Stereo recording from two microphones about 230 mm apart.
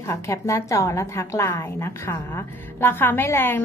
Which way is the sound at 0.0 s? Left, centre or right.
Centre.